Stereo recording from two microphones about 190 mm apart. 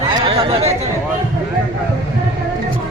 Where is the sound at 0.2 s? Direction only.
25° right (ahead or behind).